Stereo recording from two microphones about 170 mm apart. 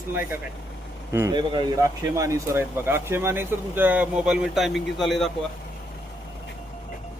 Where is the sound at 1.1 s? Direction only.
15° right (ahead or behind).